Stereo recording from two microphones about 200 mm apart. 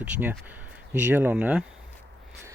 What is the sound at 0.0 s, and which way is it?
Speech, 10° right (ahead or behind).